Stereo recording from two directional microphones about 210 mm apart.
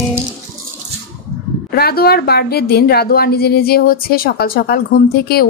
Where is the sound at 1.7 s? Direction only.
45° left (ahead or behind).